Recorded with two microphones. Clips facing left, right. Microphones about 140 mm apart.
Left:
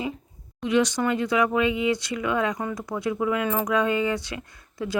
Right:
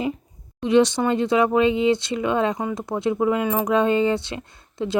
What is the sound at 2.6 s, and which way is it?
Speech, 15° right (ahead or behind).